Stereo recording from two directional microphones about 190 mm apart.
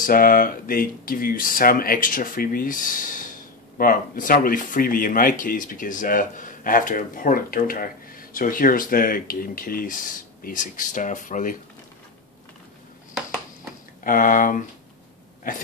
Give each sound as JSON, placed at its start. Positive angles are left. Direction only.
{"t": 0.0, "sound": "speech", "side_deg": 50}
{"t": 14.0, "sound": "speech", "side_deg": 45}